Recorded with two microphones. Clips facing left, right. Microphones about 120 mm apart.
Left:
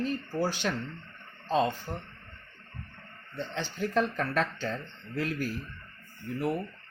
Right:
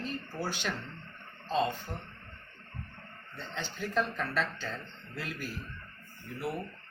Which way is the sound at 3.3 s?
40° left (ahead or behind).